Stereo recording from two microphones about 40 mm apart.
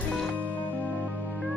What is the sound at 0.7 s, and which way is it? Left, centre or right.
Music, left.